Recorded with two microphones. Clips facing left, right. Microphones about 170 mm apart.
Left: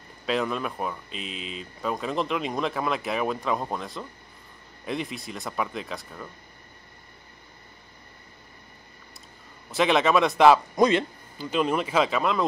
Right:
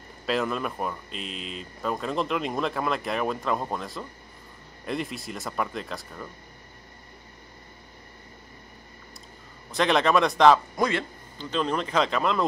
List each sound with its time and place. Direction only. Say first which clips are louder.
0.3 s speech: even; centre (ahead or behind)
9.7 s speech: left 1 dB; 5° left (ahead or behind)
10.8 s a man's voice: left 5 dB; 20° left (ahead or behind)
11.3 s speech: left 2 dB; 10° left (ahead or behind)